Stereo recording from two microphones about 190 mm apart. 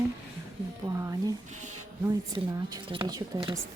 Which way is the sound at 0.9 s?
15° right (ahead or behind).